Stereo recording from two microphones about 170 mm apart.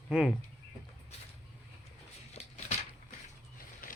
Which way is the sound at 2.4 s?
40° left (ahead or behind).